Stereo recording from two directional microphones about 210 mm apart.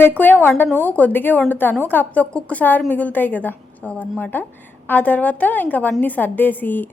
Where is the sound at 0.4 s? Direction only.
10° left (ahead or behind).